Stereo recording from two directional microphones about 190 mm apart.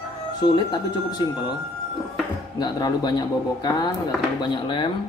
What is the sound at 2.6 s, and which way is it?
Speech, 20° left (ahead or behind).